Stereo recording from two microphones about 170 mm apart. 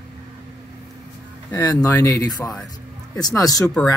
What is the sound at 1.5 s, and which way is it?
Speech, 20° left (ahead or behind).